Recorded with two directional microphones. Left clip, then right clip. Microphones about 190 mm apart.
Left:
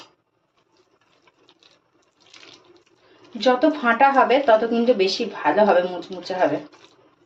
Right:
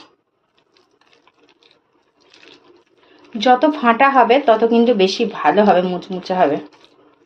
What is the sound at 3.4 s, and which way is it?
Speech, 40° right (ahead or behind).